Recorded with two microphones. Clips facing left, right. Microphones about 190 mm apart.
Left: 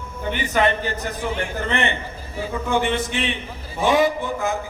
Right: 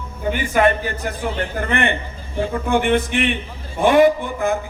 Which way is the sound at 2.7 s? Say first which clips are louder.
Right 4 dB; 55° right (ahead or behind).